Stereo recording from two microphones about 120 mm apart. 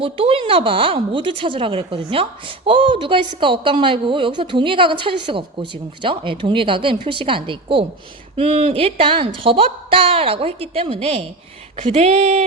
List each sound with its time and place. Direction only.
0.0 s speech: 50° right (ahead or behind)